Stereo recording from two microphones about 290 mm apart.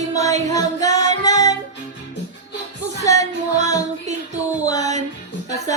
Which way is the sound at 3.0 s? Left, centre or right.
Centre.